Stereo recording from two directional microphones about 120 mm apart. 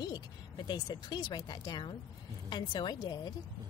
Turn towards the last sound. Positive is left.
turn(degrees=35)  # may be behind; listen again after turning